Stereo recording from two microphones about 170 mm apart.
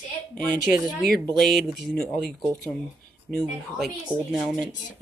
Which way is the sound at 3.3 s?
5° left (ahead or behind).